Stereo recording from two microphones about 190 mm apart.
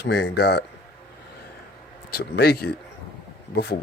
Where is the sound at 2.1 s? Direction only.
55° left (ahead or behind).